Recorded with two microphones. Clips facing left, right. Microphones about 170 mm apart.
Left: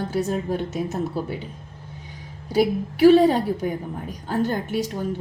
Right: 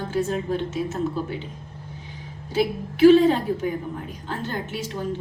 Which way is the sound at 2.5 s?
35° left (ahead or behind).